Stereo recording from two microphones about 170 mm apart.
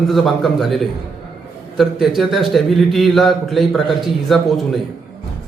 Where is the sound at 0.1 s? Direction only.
Centre (ahead or behind).